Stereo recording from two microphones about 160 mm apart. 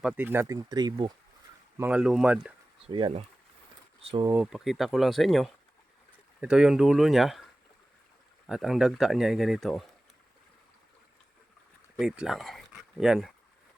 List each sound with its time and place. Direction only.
0.2 s speech: 15° right (ahead or behind)
1.8 s speech: 5° right (ahead or behind)
2.8 s speech: 35° right (ahead or behind)
4.4 s speech: centre (ahead or behind)
8.4 s speech: centre (ahead or behind)
11.9 s speech: 5° right (ahead or behind)